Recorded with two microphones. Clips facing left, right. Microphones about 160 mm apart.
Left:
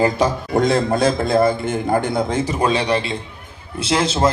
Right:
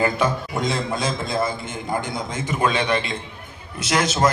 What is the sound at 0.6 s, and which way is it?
A man's voice, 55° left (ahead or behind).